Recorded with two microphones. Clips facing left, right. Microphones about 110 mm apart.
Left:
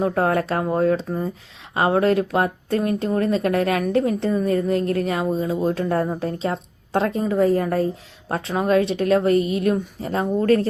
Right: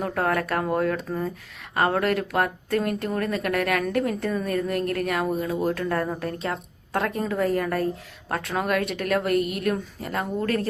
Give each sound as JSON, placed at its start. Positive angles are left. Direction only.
{"t": 0.0, "sound": "speech", "side_deg": 30}